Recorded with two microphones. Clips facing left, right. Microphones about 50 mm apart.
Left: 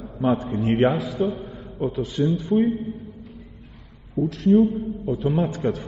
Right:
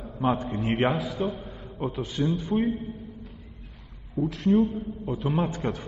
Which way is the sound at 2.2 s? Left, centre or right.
Centre.